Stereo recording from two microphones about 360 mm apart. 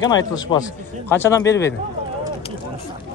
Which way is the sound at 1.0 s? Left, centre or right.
Centre.